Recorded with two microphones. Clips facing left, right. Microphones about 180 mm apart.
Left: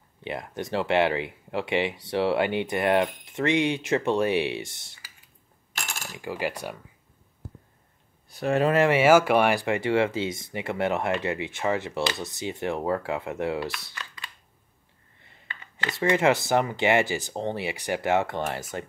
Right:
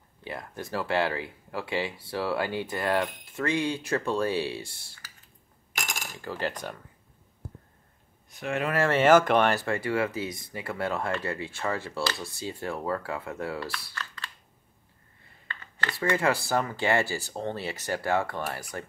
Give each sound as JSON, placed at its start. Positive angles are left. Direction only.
{"t": 0.2, "sound": "speech", "side_deg": 20}
{"t": 5.8, "sound": "cutlery", "side_deg": -15}
{"t": 6.1, "sound": "cutlery", "side_deg": 10}
{"t": 8.3, "sound": "speech", "side_deg": 35}
{"t": 8.7, "sound": "speech", "side_deg": 15}
{"t": 15.4, "sound": "speech", "side_deg": 15}